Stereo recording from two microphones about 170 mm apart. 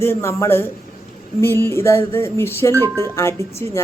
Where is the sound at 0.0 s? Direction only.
15° left (ahead or behind).